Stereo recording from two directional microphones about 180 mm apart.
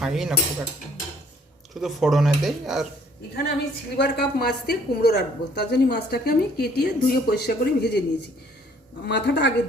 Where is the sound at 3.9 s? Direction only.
65° left (ahead or behind).